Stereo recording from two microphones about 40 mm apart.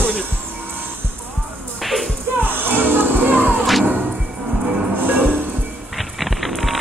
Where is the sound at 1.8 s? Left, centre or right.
Centre.